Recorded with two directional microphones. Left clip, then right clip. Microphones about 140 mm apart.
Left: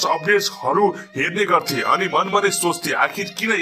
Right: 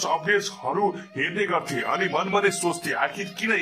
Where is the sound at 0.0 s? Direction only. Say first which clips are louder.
Left 5 dB; 25° left (ahead or behind).